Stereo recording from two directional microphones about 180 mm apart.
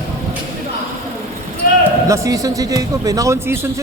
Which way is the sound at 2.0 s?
15° right (ahead or behind).